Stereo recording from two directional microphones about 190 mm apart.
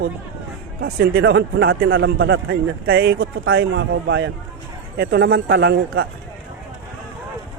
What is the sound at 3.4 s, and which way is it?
A man's voice, 90° right.